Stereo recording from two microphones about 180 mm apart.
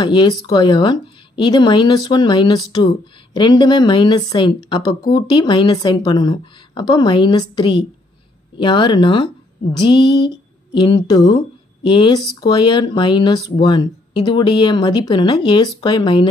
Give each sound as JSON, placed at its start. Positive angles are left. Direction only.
{"t": 0.0, "sound": "a woman's voice", "side_deg": 25}